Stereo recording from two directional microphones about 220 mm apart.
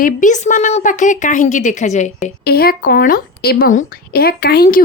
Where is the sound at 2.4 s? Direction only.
45° left (ahead or behind).